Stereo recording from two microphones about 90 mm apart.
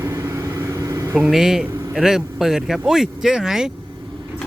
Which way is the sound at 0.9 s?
40° right (ahead or behind).